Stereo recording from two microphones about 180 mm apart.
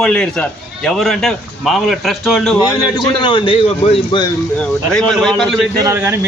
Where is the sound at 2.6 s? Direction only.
25° left (ahead or behind).